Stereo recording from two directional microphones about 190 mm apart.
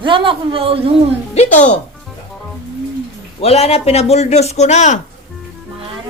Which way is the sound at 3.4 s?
30° left (ahead or behind).